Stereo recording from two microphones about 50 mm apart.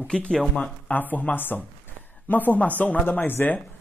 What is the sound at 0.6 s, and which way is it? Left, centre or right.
Speech, left.